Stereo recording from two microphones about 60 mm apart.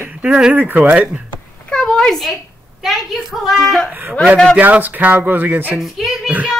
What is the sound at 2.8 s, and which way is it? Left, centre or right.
A woman's voice, centre.